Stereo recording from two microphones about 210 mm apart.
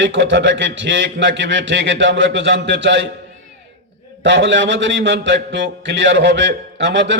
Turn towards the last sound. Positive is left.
turn(degrees=-60)  # may be behind; listen again after turning